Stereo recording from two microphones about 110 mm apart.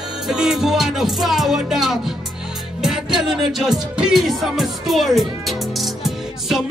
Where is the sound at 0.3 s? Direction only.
5° right (ahead or behind).